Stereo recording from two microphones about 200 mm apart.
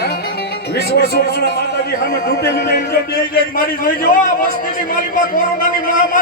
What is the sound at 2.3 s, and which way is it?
A man's voice, 55° left (ahead or behind).